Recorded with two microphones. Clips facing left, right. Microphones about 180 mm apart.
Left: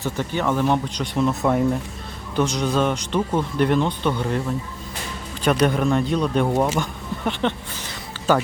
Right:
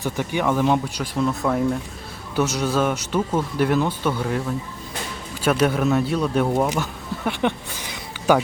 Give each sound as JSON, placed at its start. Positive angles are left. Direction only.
{"t": 0.0, "sound": "speech", "side_deg": -10}